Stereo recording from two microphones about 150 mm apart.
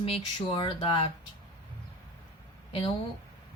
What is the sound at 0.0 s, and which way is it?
A woman's voice, 35° left (ahead or behind).